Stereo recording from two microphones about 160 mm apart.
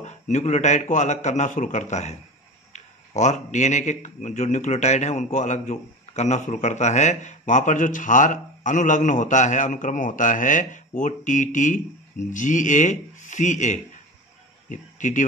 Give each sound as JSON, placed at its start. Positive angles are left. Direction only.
{"t": 0.0, "sound": "a man's voice", "side_deg": 45}